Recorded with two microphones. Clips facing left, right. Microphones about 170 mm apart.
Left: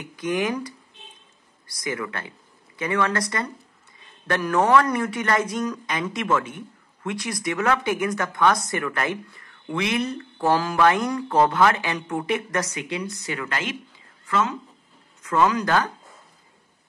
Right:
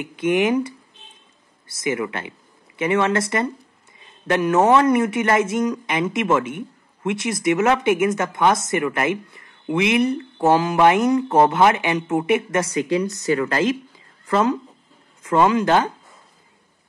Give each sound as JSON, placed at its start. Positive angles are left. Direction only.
{"t": 0.0, "sound": "speech", "side_deg": -25}
{"t": 12.8, "sound": "speech", "side_deg": -40}